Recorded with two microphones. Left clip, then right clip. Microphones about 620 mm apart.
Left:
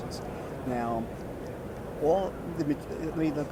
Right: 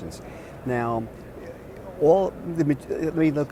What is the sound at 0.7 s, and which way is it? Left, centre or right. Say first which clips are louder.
Speech: right 6 dB; right.